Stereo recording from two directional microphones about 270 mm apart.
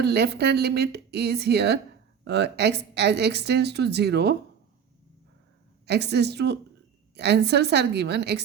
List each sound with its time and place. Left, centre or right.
0.0 s speech: right
5.8 s speech: right